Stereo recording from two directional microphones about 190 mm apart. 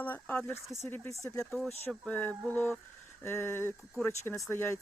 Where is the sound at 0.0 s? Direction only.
10° left (ahead or behind).